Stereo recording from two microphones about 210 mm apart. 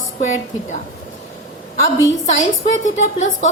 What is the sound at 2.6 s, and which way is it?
Speech, 35° left (ahead or behind).